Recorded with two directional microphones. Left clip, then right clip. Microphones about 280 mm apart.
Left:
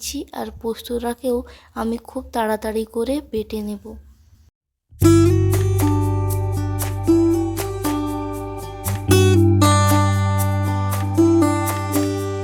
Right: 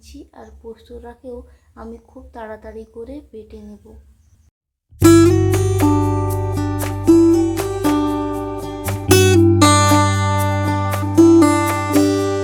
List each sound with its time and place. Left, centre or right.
0.0 s a woman's voice: left
4.9 s music: centre